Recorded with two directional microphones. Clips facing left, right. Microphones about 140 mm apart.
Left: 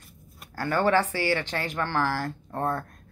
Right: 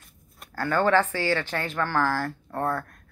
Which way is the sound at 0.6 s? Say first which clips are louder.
Right 1 dB; 15° left (ahead or behind).